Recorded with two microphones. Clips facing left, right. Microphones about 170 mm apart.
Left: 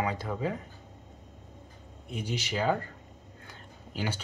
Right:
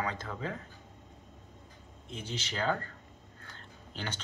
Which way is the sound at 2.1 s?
10° left (ahead or behind).